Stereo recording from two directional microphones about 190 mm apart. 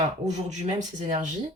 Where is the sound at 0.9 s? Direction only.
40° right (ahead or behind).